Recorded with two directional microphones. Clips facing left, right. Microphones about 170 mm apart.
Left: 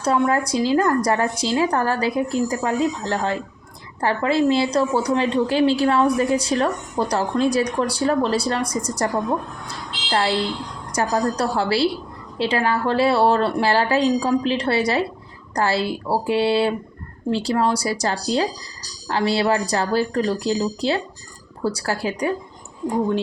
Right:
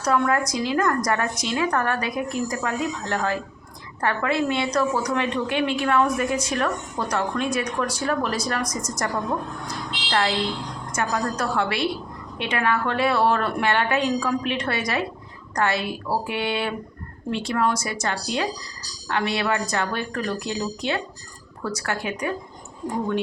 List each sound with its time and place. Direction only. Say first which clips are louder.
0.0 s a woman's voice: left 2 dB; 25° left (ahead or behind)